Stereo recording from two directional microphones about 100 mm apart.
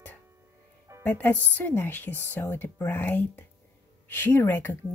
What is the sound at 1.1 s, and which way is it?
Speech, 20° left (ahead or behind).